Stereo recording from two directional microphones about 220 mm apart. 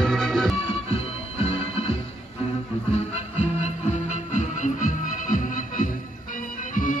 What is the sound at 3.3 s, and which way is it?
Music, 30° left (ahead or behind).